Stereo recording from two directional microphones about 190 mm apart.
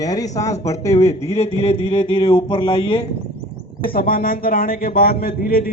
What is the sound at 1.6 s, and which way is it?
A man's voice, 30° left (ahead or behind).